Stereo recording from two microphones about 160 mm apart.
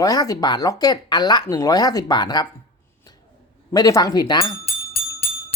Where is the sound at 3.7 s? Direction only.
25° left (ahead or behind).